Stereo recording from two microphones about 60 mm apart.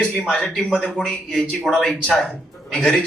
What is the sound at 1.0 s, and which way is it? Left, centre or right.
A woman's voice, centre.